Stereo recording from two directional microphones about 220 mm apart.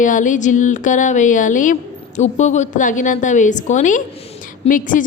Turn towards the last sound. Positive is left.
turn(degrees=35)  # may be behind; listen again after turning